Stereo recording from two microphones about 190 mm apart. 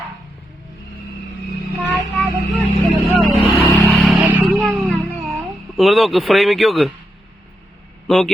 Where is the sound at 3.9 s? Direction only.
Centre (ahead or behind).